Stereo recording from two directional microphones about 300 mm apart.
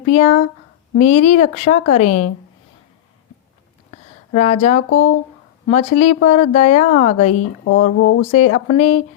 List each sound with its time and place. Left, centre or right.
0.0 s speech: left
4.4 s speech: left
4.9 s speech: left
5.6 s speech: left
7.3 s speech: left
8.3 s speech: left